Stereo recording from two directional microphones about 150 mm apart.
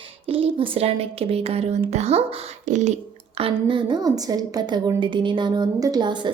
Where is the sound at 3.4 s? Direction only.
35° right (ahead or behind).